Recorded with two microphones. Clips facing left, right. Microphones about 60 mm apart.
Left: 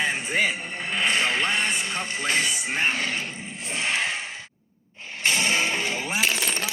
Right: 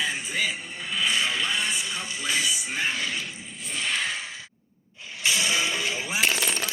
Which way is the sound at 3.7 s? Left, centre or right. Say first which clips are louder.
Left 2 dB; left.